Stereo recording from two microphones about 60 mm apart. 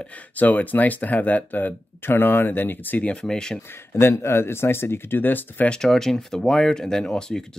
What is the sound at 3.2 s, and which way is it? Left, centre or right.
Speech, centre.